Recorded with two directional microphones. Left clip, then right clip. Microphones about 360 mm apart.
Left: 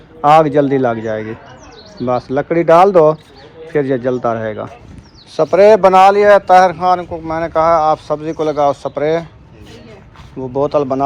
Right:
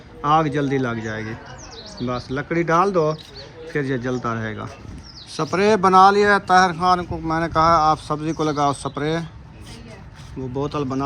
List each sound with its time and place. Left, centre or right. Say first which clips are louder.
0.2 s speech: left 10 dB; centre
2.9 s speech: left 11 dB; left
3.7 s speech: left 9 dB; centre
10.6 s speech: left 11 dB; centre